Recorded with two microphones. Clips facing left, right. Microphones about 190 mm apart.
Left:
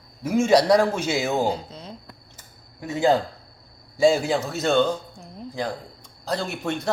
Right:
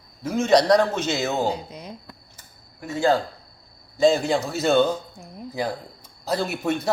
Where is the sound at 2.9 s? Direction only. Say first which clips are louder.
Left 1 dB; 20° left (ahead or behind).